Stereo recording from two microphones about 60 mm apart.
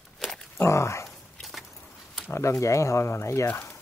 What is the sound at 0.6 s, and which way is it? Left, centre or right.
Speech, left.